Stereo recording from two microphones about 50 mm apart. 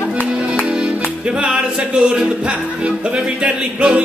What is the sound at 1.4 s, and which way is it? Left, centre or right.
Music, right.